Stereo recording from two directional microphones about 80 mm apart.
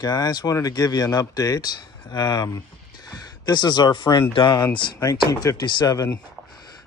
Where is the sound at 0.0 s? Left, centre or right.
Left.